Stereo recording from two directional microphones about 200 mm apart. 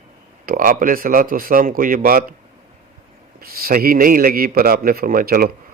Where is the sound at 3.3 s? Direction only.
45° right (ahead or behind).